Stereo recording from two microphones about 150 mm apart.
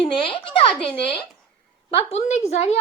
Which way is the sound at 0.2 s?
35° left (ahead or behind).